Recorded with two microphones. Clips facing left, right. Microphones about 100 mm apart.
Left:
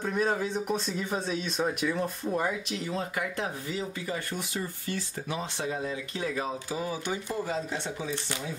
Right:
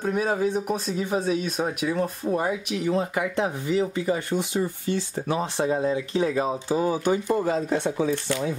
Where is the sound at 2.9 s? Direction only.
25° right (ahead or behind).